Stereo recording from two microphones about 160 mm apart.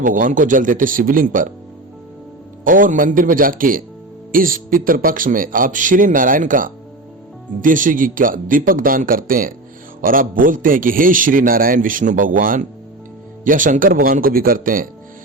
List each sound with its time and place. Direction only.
0.0 s a man's voice: 55° right (ahead or behind)
2.6 s a man's voice: 55° right (ahead or behind)